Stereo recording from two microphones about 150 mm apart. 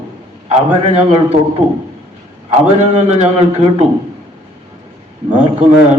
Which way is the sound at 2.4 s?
50° right (ahead or behind).